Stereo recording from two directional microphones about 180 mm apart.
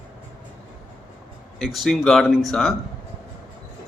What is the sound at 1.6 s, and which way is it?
A man's voice, centre (ahead or behind).